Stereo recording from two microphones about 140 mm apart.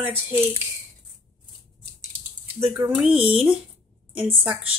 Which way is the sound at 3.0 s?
10° right (ahead or behind).